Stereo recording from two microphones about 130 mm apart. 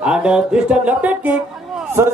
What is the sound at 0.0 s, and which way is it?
A man's voice, 5° right (ahead or behind).